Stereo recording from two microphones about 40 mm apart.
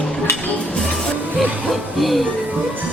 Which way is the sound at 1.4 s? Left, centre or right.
Centre.